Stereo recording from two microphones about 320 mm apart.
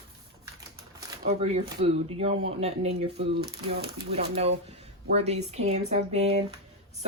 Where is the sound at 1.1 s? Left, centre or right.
Centre.